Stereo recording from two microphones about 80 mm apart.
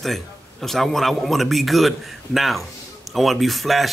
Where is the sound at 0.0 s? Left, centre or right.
Centre.